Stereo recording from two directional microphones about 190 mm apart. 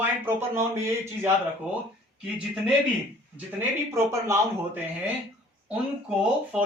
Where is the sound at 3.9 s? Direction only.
15° right (ahead or behind).